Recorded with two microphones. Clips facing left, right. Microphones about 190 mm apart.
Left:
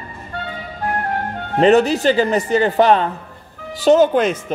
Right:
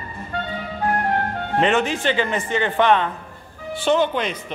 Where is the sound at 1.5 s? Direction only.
40° left (ahead or behind).